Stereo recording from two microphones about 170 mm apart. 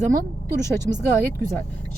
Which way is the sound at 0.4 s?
15° left (ahead or behind).